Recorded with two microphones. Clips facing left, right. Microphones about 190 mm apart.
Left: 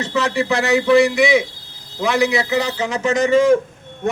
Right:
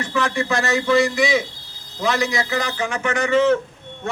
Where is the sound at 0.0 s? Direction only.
20° left (ahead or behind).